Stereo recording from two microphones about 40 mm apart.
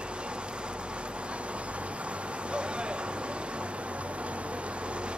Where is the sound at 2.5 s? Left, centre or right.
Right.